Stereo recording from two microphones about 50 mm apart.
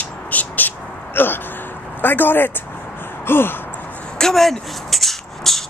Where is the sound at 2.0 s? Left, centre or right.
Left.